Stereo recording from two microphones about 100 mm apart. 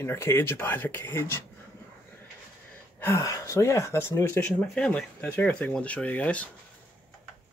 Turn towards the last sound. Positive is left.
turn(degrees=15)  # may be behind; listen again after turning